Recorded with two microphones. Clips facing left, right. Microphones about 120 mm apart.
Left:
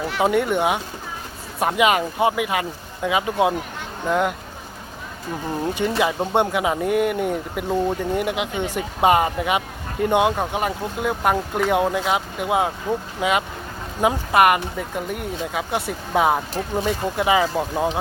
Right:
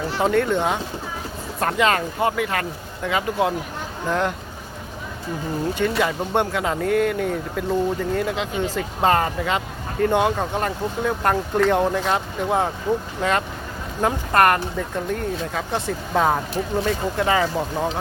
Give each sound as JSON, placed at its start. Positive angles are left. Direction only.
{"t": 0.2, "sound": "speech", "side_deg": 15}
{"t": 6.0, "sound": "speech", "side_deg": 15}